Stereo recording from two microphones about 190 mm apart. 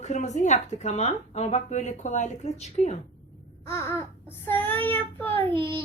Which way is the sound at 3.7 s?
15° left (ahead or behind).